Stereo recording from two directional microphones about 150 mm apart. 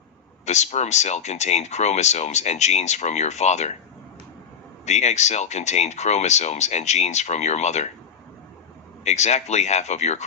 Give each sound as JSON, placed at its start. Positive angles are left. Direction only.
{"t": 0.4, "sound": "speech", "side_deg": 50}
{"t": 4.9, "sound": "speech", "side_deg": 50}
{"t": 9.0, "sound": "speech", "side_deg": 50}